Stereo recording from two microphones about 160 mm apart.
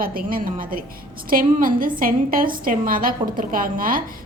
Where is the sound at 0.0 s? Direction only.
65° right (ahead or behind).